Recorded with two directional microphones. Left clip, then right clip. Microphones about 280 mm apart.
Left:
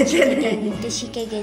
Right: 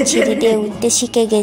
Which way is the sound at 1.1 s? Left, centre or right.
Right.